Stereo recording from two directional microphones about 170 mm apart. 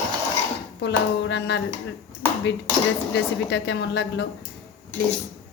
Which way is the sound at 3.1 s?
90° left.